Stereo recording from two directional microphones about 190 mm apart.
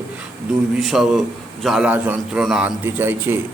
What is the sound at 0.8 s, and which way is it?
Speech, centre (ahead or behind).